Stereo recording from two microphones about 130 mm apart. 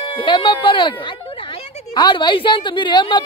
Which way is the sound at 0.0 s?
40° left (ahead or behind).